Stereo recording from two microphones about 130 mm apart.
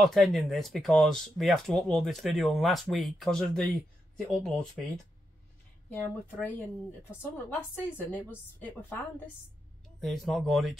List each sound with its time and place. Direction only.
0.0 s speech: centre (ahead or behind)
6.4 s a woman's voice: 15° left (ahead or behind)
9.9 s speech: centre (ahead or behind)